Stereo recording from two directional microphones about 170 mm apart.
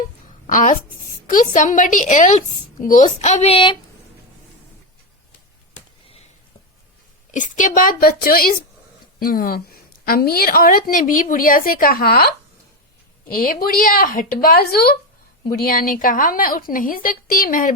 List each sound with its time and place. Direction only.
0.4 s a woman's voice: 50° left (ahead or behind); by 3.8 s 30° left (ahead or behind)
7.3 s a woman's voice: 50° left (ahead or behind)